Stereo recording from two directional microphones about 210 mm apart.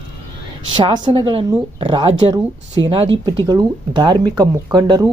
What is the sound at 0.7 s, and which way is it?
A woman's voice, 20° right (ahead or behind).